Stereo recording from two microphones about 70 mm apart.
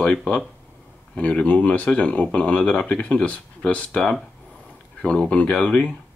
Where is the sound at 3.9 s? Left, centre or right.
Centre.